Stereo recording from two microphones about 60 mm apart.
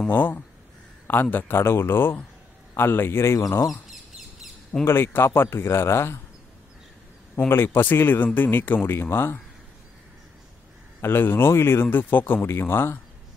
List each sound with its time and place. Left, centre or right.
0.1 s speech: left
3.9 s bird: centre
4.8 s speech: left
7.3 s speech: left
11.0 s speech: left